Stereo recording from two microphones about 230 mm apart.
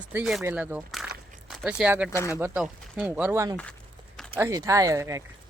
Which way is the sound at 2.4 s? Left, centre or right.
Centre.